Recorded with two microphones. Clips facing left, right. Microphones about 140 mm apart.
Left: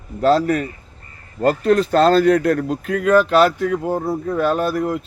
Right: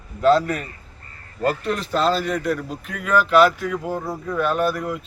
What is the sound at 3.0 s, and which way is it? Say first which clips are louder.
A man's voice: left 2 dB; 35° left (ahead or behind).